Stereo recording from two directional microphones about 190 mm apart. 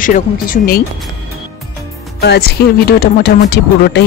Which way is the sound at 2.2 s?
60° left (ahead or behind).